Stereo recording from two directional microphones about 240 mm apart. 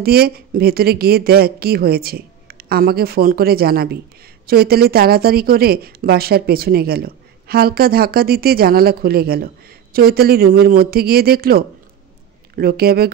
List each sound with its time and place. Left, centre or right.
0.0 s speech: right